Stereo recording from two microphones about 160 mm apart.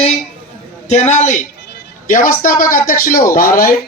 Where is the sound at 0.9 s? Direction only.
45° left (ahead or behind).